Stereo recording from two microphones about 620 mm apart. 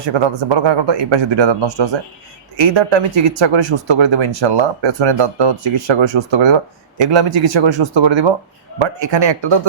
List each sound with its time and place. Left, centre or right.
0.0 s speech: right